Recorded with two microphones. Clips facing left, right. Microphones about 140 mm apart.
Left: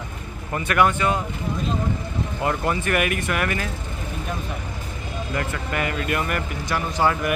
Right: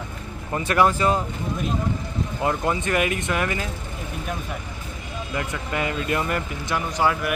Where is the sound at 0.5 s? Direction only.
25° right (ahead or behind).